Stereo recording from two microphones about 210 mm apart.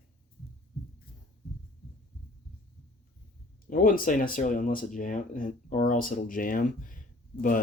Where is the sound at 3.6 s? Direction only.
40° left (ahead or behind).